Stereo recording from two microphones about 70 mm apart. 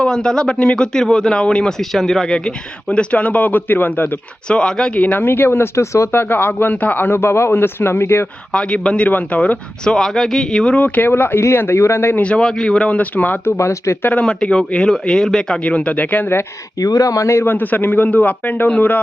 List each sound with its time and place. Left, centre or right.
0.0 s a man's voice: centre; by 4.1 s left
4.4 s a man's voice: centre; by 6.1 s left
6.1 s a man's voice: left
8.5 s speech: centre
9.8 s speech: centre
10.8 s a man's voice: left
11.1 s a man's voice: left
12.1 s speech: centre
13.6 s speech: left
14.0 s speech: centre
16.8 s a man's voice: left